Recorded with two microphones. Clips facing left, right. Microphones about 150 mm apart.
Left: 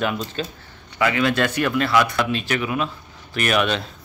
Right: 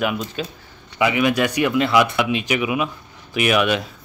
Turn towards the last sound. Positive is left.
turn(degrees=-10)  # may be behind; listen again after turning